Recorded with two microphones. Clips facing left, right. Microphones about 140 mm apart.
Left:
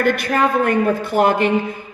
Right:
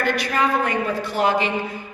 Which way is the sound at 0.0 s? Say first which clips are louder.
Left 4 dB; 50° left (ahead or behind).